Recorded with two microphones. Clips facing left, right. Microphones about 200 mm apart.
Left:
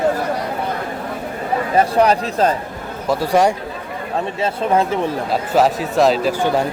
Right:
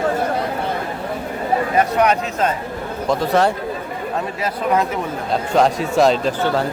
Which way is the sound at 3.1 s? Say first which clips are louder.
Left 1 dB; 10° left (ahead or behind).